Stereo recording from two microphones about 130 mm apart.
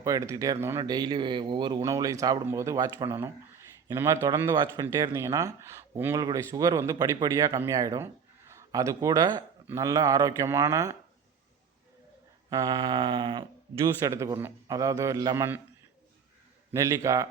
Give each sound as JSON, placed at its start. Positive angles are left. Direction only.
{"t": 0.0, "sound": "a man's voice", "side_deg": -25}
{"t": 12.5, "sound": "a man's voice", "side_deg": -30}
{"t": 13.7, "sound": "speech", "side_deg": -25}
{"t": 16.7, "sound": "speech", "side_deg": -25}